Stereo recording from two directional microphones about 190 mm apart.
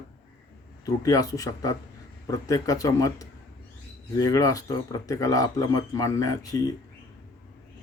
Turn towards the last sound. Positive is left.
turn(degrees=20)  # may be behind; listen again after turning